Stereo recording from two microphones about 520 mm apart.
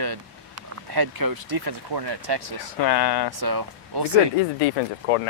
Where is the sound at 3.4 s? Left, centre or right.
Right.